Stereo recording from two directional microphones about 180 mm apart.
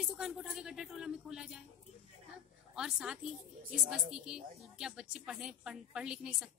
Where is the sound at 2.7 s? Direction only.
5° right (ahead or behind).